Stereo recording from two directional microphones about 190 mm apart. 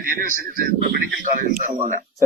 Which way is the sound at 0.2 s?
45° right (ahead or behind).